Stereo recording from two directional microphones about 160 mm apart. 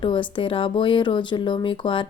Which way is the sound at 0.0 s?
30° left (ahead or behind).